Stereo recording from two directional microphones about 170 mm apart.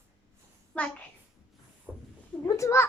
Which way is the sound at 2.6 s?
15° left (ahead or behind).